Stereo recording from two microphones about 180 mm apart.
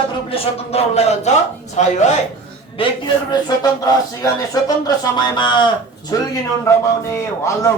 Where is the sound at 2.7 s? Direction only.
30° left (ahead or behind).